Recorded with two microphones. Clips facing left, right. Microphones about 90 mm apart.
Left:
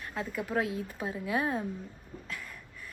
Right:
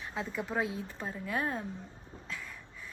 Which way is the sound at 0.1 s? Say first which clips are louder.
Left 3 dB; 5° left (ahead or behind).